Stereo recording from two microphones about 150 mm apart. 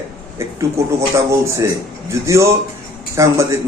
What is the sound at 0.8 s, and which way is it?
A man's voice, 20° right (ahead or behind).